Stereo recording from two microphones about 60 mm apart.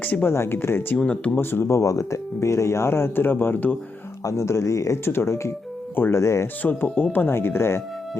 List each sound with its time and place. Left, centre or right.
0.0 s speech: left
0.3 s speech: left
0.9 s speech: centre
1.4 s speech: left
1.7 s speech: left
4.2 s speech: left
5.0 s speech: left
6.6 s speech: left
7.3 s speech: left